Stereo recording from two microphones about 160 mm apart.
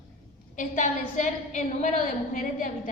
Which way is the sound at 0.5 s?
55° left (ahead or behind).